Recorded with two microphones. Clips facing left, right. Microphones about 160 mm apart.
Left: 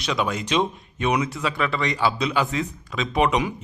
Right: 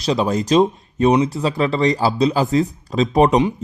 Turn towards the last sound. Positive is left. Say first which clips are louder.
# right 7 dB
turn(degrees=-40)  # may be behind; listen again after turning